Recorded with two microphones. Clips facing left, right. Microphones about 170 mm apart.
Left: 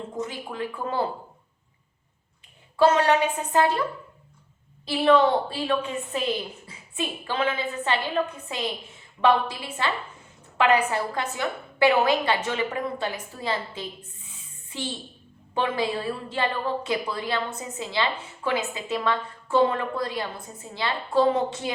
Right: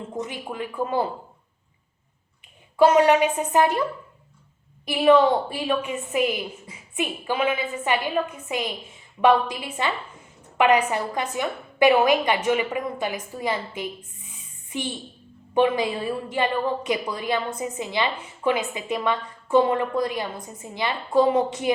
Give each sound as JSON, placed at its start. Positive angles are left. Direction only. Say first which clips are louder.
{"t": 0.2, "sound": "a woman's voice", "louder": "even", "side_deg": -15}
{"t": 2.7, "sound": "a woman's voice", "louder": "right 3 dB", "side_deg": -15}
{"t": 4.9, "sound": "a woman's voice", "louder": "right 2 dB", "side_deg": -15}